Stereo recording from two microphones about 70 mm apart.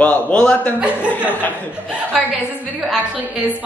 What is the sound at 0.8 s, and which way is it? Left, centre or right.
Speech, right.